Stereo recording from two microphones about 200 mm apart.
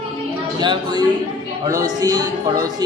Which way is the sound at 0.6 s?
20° right (ahead or behind).